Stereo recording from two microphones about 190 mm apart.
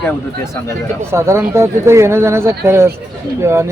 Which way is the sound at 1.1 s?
15° right (ahead or behind).